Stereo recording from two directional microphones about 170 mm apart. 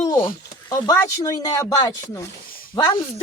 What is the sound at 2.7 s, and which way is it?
Speech, 25° left (ahead or behind).